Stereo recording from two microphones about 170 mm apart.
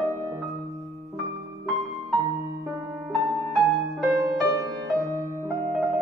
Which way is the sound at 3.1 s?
20° right (ahead or behind).